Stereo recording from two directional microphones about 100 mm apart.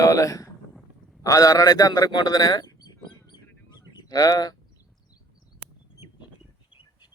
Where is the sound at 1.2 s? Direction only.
35° left (ahead or behind).